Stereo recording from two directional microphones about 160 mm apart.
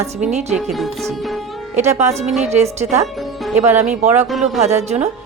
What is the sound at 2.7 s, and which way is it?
Speech, 45° right (ahead or behind).